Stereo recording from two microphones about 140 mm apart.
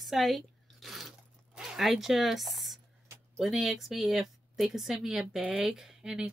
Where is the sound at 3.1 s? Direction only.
20° right (ahead or behind).